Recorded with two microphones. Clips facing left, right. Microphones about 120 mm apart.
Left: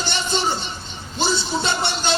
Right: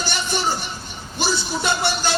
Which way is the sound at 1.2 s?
20° left (ahead or behind).